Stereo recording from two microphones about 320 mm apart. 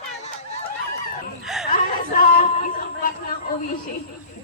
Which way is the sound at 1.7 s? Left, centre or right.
Left.